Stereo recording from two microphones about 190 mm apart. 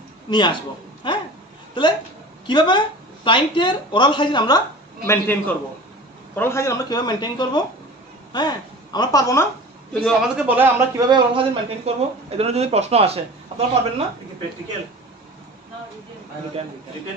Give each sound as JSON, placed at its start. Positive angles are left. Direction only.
{"t": 0.3, "sound": "a woman's voice", "side_deg": 25}
{"t": 1.0, "sound": "a sound", "side_deg": 25}
{"t": 2.4, "sound": "a woman's voice", "side_deg": 25}
{"t": 10.0, "sound": "a man's voice", "side_deg": -5}
{"t": 11.1, "sound": "a man's voice", "side_deg": -25}